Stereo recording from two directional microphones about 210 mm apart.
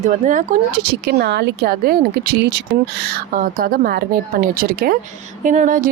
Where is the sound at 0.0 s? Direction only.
35° right (ahead or behind).